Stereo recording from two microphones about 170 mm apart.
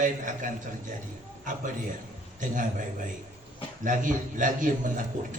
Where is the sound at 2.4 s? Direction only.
50° right (ahead or behind).